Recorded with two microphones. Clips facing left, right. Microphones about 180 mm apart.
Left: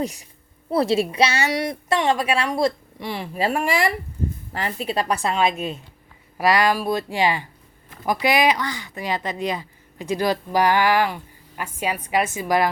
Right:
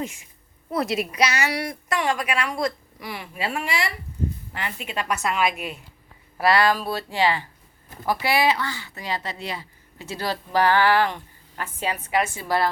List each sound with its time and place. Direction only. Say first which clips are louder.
0.0 s a woman's voice: left 5 dB; 40° left (ahead or behind)
4.5 s a woman's voice: left 6 dB; 35° left (ahead or behind)
6.3 s speech: left 1 dB; 15° left (ahead or behind)